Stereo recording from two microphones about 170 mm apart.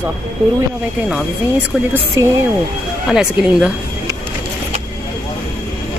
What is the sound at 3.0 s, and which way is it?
Speech, 5° right (ahead or behind).